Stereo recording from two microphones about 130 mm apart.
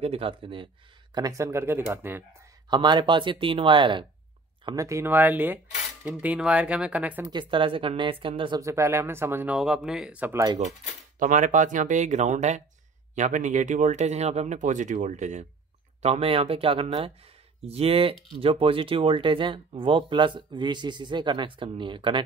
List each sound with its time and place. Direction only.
0.0 s speech: 45° right (ahead or behind)
1.1 s speech: 25° right (ahead or behind)
2.7 s speech: 35° right (ahead or behind)
4.6 s speech: 25° right (ahead or behind)
7.2 s speech: 40° right (ahead or behind)
8.5 s speech: 20° right (ahead or behind)
9.6 s speech: 5° right (ahead or behind)
10.3 s speech: 30° right (ahead or behind)
11.1 s speech: 80° right
16.0 s speech: 50° right (ahead or behind)